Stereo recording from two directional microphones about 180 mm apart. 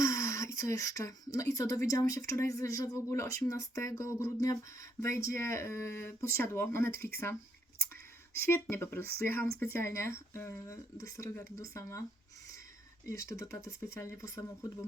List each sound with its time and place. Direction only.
0.0 s speech: 15° left (ahead or behind)
8.3 s speech: 10° left (ahead or behind)
13.1 s speech: 15° left (ahead or behind)